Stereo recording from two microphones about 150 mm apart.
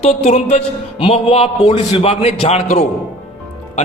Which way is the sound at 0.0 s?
45° left (ahead or behind).